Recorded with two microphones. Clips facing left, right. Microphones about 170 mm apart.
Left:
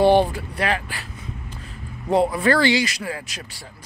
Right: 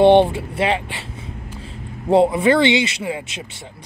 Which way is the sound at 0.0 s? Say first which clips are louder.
Right 4 dB; 25° right (ahead or behind).